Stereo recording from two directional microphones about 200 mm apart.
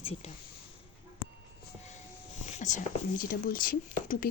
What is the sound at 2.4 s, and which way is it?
Speech, 35° left (ahead or behind).